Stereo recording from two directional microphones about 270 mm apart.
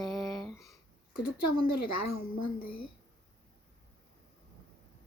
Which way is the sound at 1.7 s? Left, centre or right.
Left.